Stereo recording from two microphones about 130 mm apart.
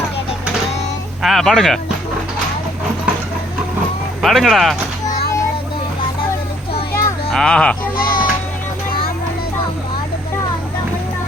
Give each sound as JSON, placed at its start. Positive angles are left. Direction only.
{"t": 1.2, "sound": "speech", "side_deg": 0}
{"t": 4.2, "sound": "speech", "side_deg": 0}
{"t": 7.3, "sound": "speech", "side_deg": 5}
{"t": 7.9, "sound": "music", "side_deg": 90}